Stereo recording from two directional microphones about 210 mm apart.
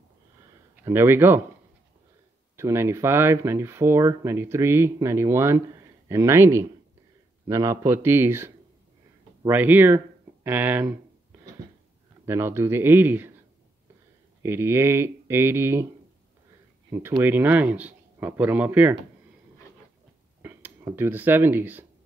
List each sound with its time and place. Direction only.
0.8 s speech: 10° right (ahead or behind)
2.5 s speech: 10° right (ahead or behind)
12.3 s speech: 10° right (ahead or behind)
14.4 s speech: 10° right (ahead or behind)
16.9 s speech: 10° right (ahead or behind)
20.4 s speech: 10° right (ahead or behind)